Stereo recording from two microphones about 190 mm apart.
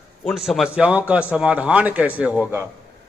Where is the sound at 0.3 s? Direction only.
Centre (ahead or behind).